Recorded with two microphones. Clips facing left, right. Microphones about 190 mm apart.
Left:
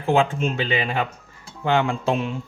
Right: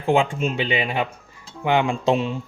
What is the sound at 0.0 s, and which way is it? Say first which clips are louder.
Speech: even; 15° right (ahead or behind).